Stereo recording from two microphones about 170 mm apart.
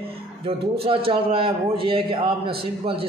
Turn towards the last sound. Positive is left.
turn(degrees=-30)  # may be behind; listen again after turning